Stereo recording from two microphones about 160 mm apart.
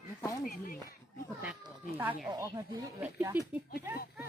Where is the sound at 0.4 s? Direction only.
60° left (ahead or behind).